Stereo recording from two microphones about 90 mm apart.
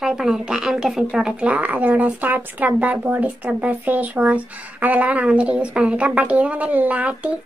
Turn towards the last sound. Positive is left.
turn(degrees=-15)  # may be behind; listen again after turning